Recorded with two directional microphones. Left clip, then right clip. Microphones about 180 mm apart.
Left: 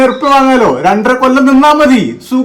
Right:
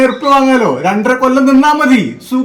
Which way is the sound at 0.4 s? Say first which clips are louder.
Left 3 dB; 10° left (ahead or behind).